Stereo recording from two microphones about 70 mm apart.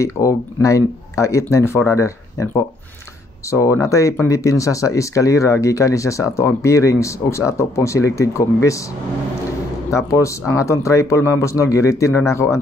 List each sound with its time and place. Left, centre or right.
0.0 s speech: left
9.8 s speech: left